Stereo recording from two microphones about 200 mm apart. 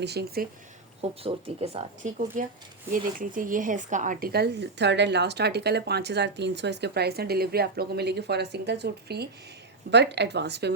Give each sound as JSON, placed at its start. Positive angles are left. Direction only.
{"t": 0.0, "sound": "speech", "side_deg": -55}
{"t": 1.0, "sound": "speech", "side_deg": -30}